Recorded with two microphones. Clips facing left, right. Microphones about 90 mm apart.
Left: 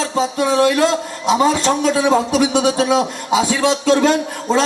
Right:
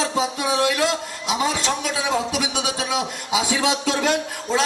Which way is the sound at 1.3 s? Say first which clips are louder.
Left 8 dB; 40° left (ahead or behind).